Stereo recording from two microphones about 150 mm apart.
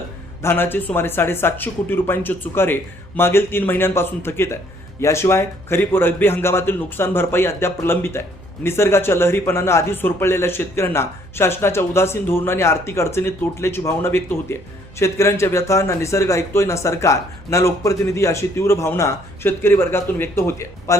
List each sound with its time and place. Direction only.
0.4 s a man's voice: 15° left (ahead or behind)